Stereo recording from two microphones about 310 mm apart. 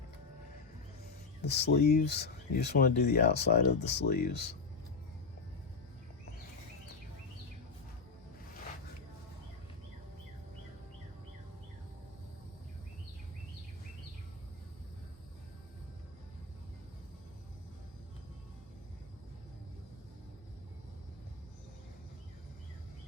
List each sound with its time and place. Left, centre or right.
1.4 s speech: left